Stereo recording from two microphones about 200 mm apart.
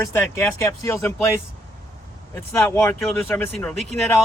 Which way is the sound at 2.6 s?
5° left (ahead or behind).